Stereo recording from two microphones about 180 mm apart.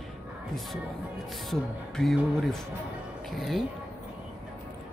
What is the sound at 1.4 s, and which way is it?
Speech, centre (ahead or behind).